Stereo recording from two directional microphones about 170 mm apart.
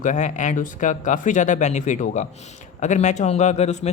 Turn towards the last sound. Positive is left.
turn(degrees=40)  # may be behind; listen again after turning